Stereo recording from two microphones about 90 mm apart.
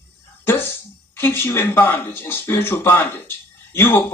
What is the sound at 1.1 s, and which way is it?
Speech, 25° left (ahead or behind).